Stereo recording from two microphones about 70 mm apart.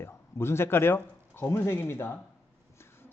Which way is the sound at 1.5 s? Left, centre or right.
Left.